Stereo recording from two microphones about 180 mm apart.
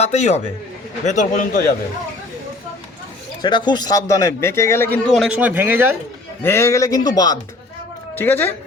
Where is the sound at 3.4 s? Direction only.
25° left (ahead or behind); by 5.9 s 10° right (ahead or behind).